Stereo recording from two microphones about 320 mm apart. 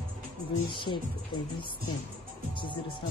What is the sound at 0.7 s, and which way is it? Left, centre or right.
Speech, centre.